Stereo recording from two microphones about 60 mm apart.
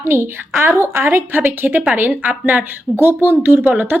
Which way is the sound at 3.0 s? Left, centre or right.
Right.